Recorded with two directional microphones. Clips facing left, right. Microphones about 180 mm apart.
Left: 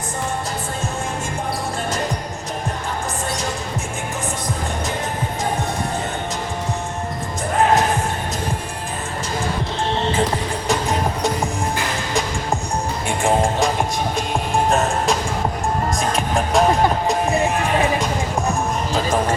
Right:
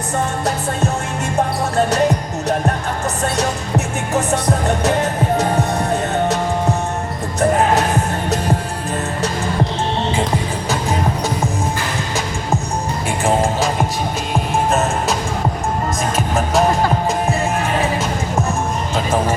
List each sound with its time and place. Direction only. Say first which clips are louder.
4.1 s music: right 11 dB; 70° right (ahead or behind)
13.2 s music: right 1 dB; centre (ahead or behind)
14.7 s music: even; centre (ahead or behind)
16.1 s music: right 2 dB; centre (ahead or behind)